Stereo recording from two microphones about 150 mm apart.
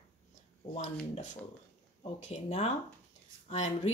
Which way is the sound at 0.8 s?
50° left (ahead or behind).